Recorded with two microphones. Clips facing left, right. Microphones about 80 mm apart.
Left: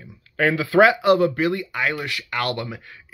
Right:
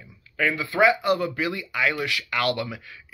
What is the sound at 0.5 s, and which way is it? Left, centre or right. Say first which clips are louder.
Speech: left 5 dB; left.